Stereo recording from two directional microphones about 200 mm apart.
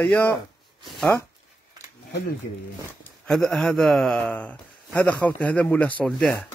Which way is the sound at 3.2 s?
Centre (ahead or behind).